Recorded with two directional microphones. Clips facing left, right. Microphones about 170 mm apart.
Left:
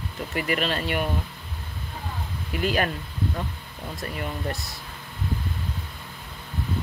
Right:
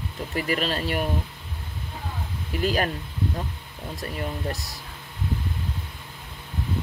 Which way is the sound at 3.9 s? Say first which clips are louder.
Right 1 dB; 35° right (ahead or behind).